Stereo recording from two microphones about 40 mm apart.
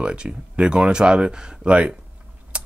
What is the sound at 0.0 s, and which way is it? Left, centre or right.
Speech, right.